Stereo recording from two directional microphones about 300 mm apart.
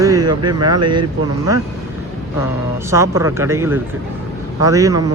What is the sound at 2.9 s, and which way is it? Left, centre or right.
Speech, centre.